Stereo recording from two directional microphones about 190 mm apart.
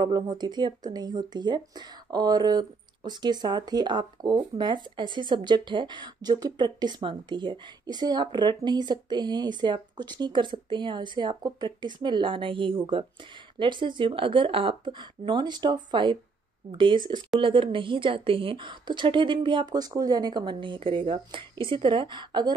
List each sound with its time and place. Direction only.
0.0 s speech: 20° right (ahead or behind)